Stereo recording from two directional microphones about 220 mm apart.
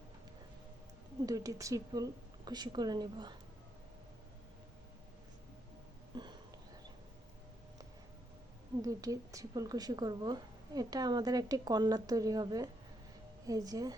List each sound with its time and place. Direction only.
1.2 s speech: 15° right (ahead or behind)
6.1 s a sound: 20° right (ahead or behind)
8.8 s speech: 15° right (ahead or behind)